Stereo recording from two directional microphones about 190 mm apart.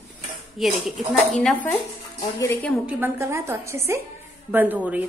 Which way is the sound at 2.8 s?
10° right (ahead or behind).